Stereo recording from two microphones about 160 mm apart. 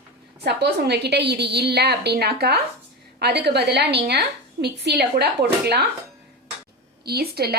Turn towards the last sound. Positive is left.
turn(degrees=-75)  # may be behind; listen again after turning